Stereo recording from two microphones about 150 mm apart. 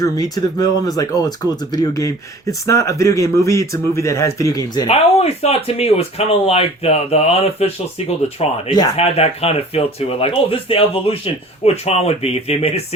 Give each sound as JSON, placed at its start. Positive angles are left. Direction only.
{"t": 0.0, "sound": "speech", "side_deg": 25}
{"t": 4.9, "sound": "speech", "side_deg": 45}